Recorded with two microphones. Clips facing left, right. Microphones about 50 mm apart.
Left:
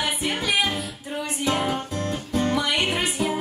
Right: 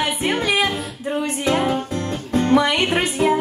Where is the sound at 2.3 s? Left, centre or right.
Right.